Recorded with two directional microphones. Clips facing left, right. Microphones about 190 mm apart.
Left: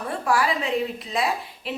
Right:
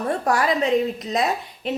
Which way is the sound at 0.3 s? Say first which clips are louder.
Right 3 dB; 40° right (ahead or behind).